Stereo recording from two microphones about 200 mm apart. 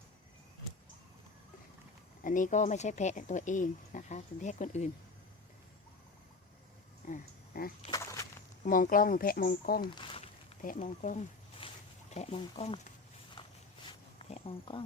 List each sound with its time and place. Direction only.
2.2 s speech: 40° left (ahead or behind)
7.1 s speech: 45° left (ahead or behind)
7.8 s a sound: 20° left (ahead or behind)
8.6 s speech: 45° left (ahead or behind)
9.9 s a sound: 25° left (ahead or behind)
10.8 s speech: 40° left (ahead or behind)
11.6 s a sound: 25° left (ahead or behind)
12.1 s speech: 30° left (ahead or behind)
13.4 s walk: 25° left (ahead or behind)
14.3 s speech: 30° left (ahead or behind)